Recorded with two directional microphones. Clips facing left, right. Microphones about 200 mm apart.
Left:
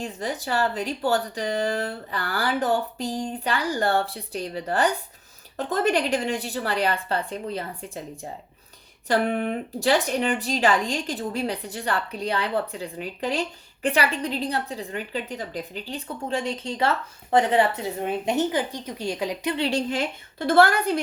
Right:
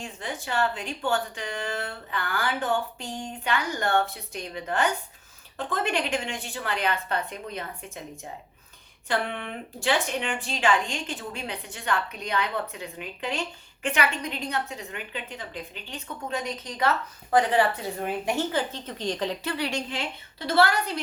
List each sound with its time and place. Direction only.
0.0 s a woman's voice: 40° left (ahead or behind); by 19.5 s 10° left (ahead or behind)
19.5 s speech: 30° left (ahead or behind)
19.9 s a woman's voice: 45° left (ahead or behind)